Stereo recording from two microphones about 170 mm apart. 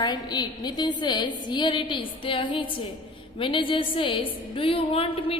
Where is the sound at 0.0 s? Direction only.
25° left (ahead or behind).